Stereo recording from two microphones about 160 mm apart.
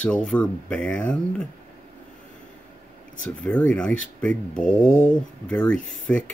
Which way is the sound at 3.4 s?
5° left (ahead or behind).